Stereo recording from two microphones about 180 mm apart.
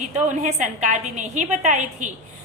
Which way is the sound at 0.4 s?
40° right (ahead or behind).